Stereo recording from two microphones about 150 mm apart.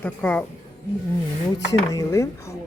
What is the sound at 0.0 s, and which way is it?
Speech, 10° left (ahead or behind).